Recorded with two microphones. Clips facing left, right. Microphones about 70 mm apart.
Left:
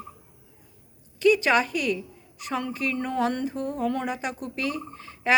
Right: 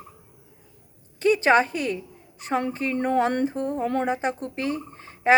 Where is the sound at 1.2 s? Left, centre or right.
Right.